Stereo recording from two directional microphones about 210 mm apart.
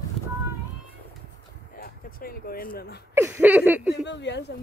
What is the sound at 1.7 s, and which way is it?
Speech, 45° left (ahead or behind).